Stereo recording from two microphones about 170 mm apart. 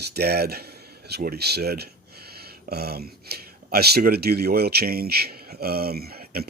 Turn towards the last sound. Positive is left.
turn(degrees=-65)  # may be behind; listen again after turning